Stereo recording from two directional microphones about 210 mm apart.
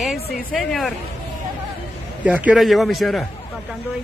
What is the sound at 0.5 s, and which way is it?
Speech, centre (ahead or behind).